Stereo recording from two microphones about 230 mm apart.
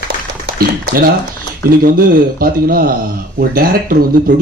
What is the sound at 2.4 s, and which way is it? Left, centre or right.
Speech, right.